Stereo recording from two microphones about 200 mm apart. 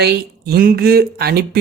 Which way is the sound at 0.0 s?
50° right (ahead or behind).